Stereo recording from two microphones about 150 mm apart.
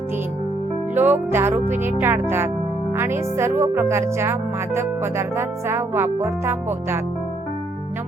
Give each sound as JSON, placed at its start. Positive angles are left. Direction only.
{"t": 0.9, "sound": "speech", "side_deg": -15}